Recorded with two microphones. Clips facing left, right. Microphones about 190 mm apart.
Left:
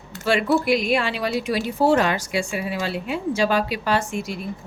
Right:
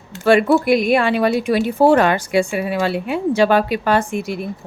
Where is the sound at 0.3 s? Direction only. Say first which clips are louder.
Right 6 dB; 55° right (ahead or behind).